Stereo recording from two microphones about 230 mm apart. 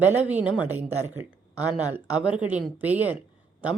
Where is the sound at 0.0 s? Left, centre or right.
Centre.